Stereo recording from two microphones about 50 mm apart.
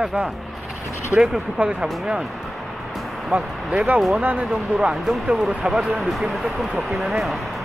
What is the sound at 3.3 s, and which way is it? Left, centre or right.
Speech, right.